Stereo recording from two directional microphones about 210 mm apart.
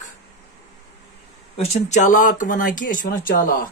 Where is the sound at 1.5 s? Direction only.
35° left (ahead or behind).